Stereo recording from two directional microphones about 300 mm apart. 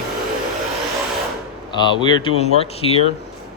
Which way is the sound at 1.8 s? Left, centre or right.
Centre.